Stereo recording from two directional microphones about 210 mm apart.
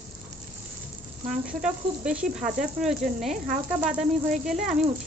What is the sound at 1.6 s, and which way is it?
Snake, 5° right (ahead or behind).